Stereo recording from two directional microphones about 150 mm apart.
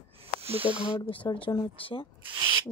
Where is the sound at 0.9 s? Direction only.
35° left (ahead or behind).